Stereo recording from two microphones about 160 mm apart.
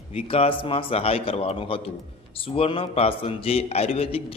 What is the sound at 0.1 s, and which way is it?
A man's voice, 35° left (ahead or behind).